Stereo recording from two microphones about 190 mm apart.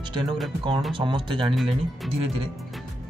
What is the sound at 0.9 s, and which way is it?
Speech, 25° right (ahead or behind).